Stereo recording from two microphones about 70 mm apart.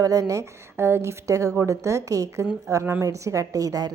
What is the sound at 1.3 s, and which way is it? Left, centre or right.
A woman's voice, right.